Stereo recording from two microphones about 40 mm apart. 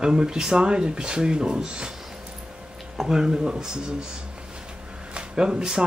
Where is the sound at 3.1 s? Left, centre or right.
Centre.